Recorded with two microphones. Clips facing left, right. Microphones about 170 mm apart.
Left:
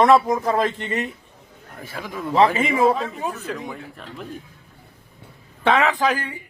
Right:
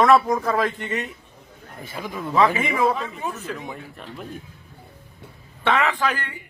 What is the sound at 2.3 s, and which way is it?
A man's voice, 30° left (ahead or behind).